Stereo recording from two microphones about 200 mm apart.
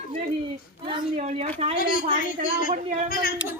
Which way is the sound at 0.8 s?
30° right (ahead or behind).